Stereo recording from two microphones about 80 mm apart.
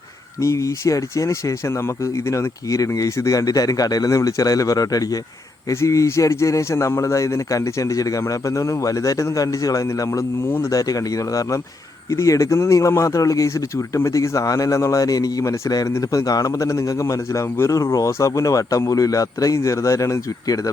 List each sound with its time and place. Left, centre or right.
0.3 s a man's voice: left
16.2 s speech: left